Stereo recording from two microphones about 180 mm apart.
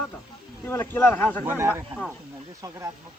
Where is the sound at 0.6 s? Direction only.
10° left (ahead or behind).